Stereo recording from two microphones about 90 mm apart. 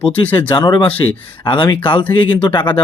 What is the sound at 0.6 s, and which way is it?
Speech, 55° left (ahead or behind).